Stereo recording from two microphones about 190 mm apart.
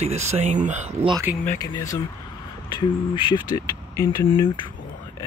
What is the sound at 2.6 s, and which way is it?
Speech, 25° left (ahead or behind).